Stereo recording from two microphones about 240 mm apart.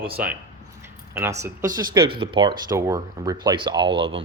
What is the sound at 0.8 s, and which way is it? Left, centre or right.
Speech, centre.